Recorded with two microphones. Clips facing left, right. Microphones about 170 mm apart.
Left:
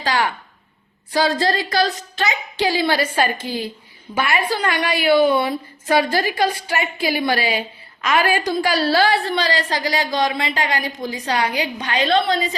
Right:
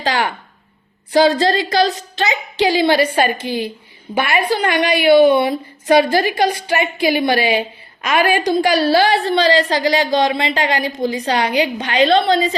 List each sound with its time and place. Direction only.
1.1 s a woman's voice: 20° right (ahead or behind)